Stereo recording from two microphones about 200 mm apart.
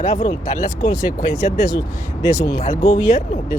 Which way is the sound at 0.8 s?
15° left (ahead or behind).